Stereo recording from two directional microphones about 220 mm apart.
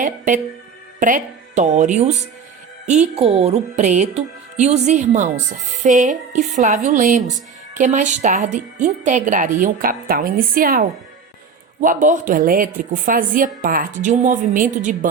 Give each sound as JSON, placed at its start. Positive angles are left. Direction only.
{"t": 0.9, "sound": "speech", "side_deg": -35}